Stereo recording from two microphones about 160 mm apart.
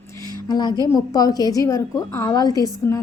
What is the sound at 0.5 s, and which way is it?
A woman's voice, 25° left (ahead or behind).